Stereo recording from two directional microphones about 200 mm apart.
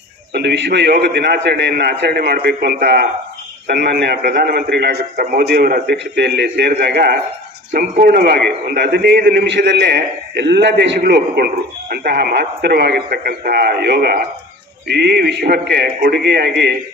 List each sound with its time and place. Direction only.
0.3 s a man's voice: 60° right (ahead or behind)